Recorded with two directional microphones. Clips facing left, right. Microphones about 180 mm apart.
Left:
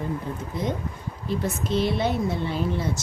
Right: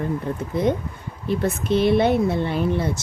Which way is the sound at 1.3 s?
60° right (ahead or behind).